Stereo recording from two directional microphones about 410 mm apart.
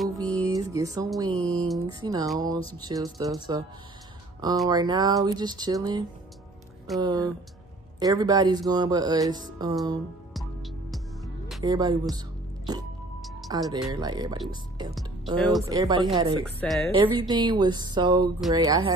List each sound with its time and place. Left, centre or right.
0.0 s music: centre
0.5 s speech: centre
11.4 s speech: centre
13.2 s music: centre
13.8 s speech: centre
15.3 s speech: centre
17.0 s speech: centre